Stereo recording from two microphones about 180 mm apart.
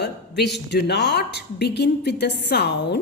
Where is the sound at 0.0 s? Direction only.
70° left (ahead or behind).